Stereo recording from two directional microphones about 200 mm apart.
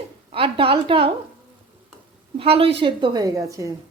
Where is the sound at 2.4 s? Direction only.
25° right (ahead or behind).